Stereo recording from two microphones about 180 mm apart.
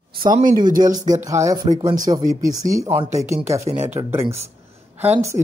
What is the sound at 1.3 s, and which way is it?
A woman's voice, 20° right (ahead or behind).